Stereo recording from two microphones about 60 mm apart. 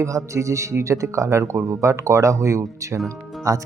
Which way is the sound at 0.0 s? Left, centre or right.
Right.